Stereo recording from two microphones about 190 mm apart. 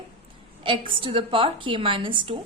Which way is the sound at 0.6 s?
25° right (ahead or behind).